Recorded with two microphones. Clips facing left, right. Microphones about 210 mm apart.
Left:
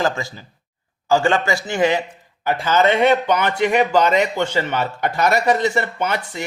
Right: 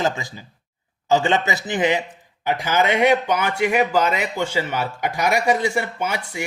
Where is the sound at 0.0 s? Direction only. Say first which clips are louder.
Left 2 dB; 15° right (ahead or behind).